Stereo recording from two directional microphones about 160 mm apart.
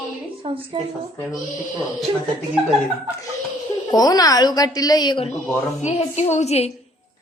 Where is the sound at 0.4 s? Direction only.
35° right (ahead or behind).